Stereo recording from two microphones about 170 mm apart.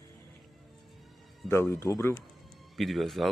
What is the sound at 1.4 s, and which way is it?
Speech, 15° left (ahead or behind).